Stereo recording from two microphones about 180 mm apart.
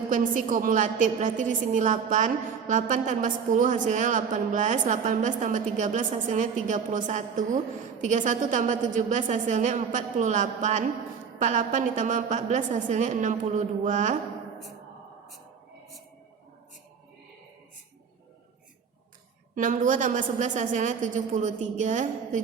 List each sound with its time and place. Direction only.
0.1 s a woman's voice: 45° right (ahead or behind)
19.5 s a woman's voice: 45° right (ahead or behind)